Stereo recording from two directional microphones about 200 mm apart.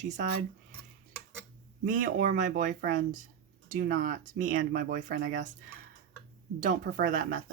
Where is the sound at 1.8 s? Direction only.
40° right (ahead or behind).